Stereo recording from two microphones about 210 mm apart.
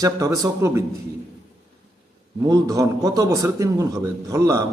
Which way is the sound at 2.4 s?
15° right (ahead or behind).